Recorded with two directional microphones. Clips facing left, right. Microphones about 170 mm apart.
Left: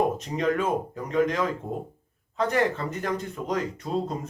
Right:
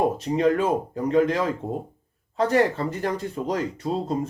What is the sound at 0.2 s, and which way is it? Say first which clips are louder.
Speech: right 5 dB; 35° right (ahead or behind).